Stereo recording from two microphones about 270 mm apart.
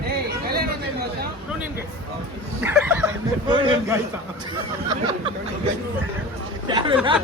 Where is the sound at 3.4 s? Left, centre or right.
Centre.